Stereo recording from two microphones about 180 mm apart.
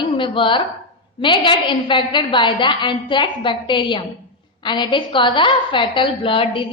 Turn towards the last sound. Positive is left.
turn(degrees=30)  # may be behind; listen again after turning